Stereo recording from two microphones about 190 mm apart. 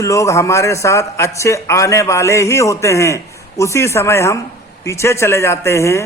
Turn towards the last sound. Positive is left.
turn(degrees=15)  # may be behind; listen again after turning